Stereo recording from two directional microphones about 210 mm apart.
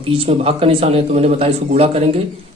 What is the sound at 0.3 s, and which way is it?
A man's voice, 25° right (ahead or behind).